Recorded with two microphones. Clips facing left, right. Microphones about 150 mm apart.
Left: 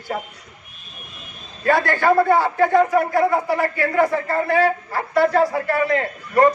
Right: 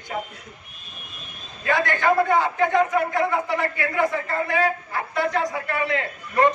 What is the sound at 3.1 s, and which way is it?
A man's voice, 35° left (ahead or behind).